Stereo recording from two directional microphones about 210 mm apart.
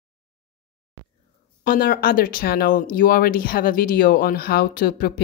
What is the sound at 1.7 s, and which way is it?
Speech, 45° left (ahead or behind).